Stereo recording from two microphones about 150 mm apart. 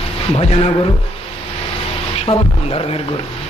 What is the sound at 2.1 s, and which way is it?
Speech, 40° left (ahead or behind).